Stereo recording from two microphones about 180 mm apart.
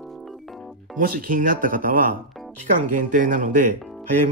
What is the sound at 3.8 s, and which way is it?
Music, 5° left (ahead or behind).